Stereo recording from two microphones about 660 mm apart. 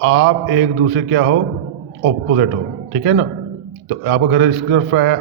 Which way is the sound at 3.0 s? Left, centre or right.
Centre.